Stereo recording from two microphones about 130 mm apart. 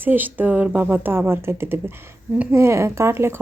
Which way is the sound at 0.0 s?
15° right (ahead or behind).